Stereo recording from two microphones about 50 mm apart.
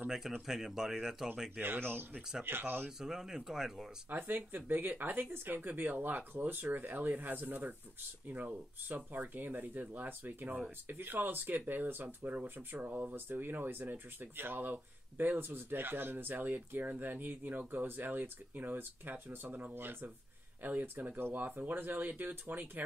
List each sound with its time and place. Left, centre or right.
0.5 s speech: centre
1.6 s speech: right
3.0 s speech: centre
4.1 s speech: right
13.1 s speech: right